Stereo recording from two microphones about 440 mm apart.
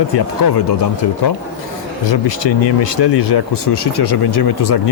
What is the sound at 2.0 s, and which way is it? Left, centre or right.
Speech, left.